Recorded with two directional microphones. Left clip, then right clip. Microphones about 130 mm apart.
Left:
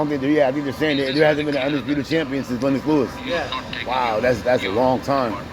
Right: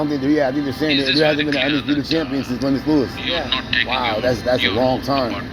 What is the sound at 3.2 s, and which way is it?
Speech, 15° right (ahead or behind).